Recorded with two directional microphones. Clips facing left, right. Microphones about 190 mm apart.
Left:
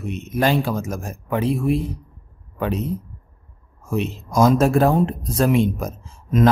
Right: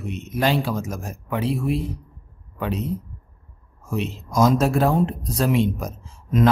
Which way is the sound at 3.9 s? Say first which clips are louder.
Left 3 dB; 50° left (ahead or behind).